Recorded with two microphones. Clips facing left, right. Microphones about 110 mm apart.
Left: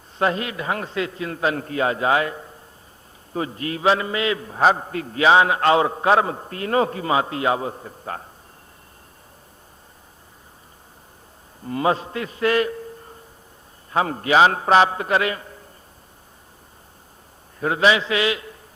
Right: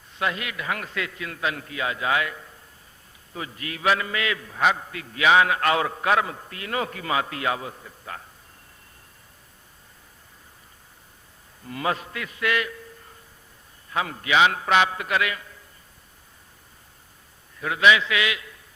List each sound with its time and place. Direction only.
0.2 s a man's voice: 35° left (ahead or behind)
11.6 s a man's voice: 30° left (ahead or behind)
17.6 s a man's voice: 35° left (ahead or behind)